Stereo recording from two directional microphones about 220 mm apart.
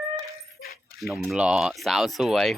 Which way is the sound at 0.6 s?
40° left (ahead or behind).